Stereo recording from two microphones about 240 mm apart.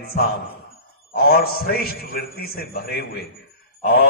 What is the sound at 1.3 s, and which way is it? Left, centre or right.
A man's voice, left.